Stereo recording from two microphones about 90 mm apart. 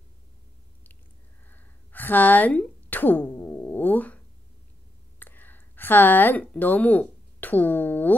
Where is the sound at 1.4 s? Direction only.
20° left (ahead or behind).